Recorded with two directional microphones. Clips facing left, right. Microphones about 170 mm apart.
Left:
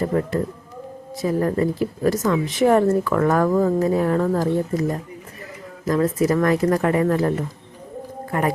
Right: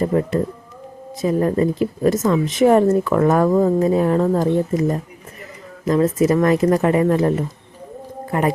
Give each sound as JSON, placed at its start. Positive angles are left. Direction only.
{"t": 0.0, "sound": "a woman's voice", "side_deg": -20}